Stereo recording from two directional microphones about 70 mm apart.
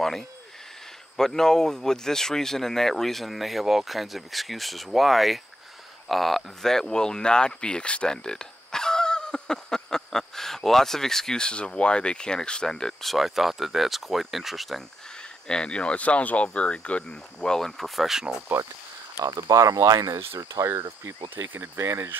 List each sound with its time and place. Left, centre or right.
0.0 s speech: centre
15.4 s speech: centre
19.3 s speech: right